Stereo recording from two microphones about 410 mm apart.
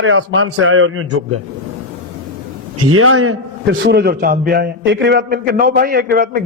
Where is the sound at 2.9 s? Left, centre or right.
Right.